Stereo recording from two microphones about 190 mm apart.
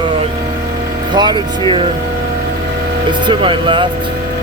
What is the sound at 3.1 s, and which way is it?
Speech, 25° right (ahead or behind).